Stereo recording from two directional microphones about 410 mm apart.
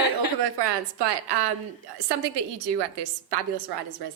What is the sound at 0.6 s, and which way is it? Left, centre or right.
A woman's voice, right.